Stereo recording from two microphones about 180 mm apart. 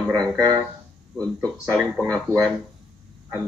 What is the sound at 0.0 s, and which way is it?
Speech, 20° right (ahead or behind).